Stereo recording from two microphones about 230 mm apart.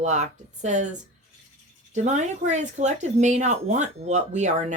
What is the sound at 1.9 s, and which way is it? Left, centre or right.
Speech, right.